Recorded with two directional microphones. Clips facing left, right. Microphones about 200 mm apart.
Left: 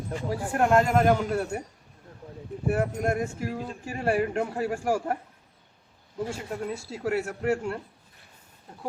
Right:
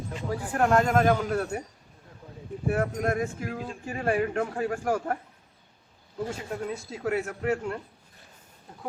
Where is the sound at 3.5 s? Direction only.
Centre (ahead or behind).